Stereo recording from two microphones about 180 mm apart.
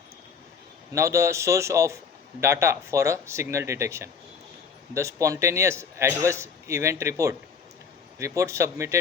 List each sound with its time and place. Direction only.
0.9 s a man's voice: 15° right (ahead or behind)